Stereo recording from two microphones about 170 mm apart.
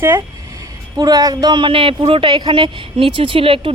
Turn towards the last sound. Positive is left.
turn(degrees=-30)  # may be behind; listen again after turning